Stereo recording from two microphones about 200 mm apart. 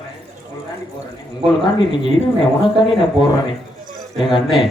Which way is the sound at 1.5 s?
25° left (ahead or behind).